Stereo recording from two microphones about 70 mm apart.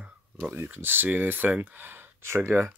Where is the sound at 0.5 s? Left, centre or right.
Right.